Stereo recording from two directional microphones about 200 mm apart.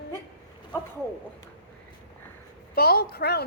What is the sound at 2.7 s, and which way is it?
Speech, 50° left (ahead or behind).